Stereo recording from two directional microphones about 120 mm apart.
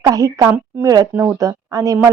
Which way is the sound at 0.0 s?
30° right (ahead or behind).